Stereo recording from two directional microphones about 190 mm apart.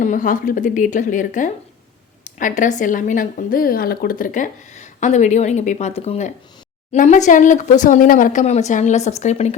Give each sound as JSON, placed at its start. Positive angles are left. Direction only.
{"t": 0.0, "sound": "a woman's voice", "side_deg": 45}